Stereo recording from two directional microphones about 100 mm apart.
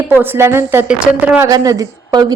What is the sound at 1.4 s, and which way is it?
Speech, 35° right (ahead or behind).